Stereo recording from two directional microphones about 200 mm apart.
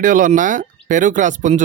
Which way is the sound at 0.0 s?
40° right (ahead or behind).